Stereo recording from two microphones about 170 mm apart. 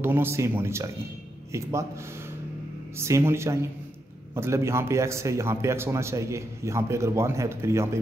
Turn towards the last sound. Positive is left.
turn(degrees=-15)  # may be behind; listen again after turning